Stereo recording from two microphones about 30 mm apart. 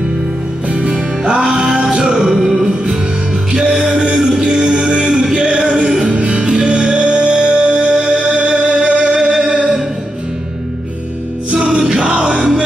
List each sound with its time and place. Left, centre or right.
0.8 s music: right
3.5 s music: right
6.0 s music: right
9.1 s music: centre
9.5 s music: right
11.5 s music: right